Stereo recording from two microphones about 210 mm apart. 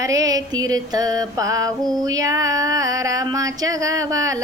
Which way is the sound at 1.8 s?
Centre (ahead or behind).